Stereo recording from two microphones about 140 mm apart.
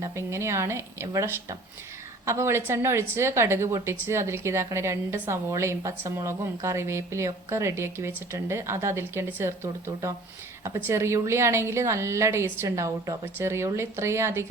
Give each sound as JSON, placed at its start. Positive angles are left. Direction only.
{"t": 0.0, "sound": "a woman's voice", "side_deg": -20}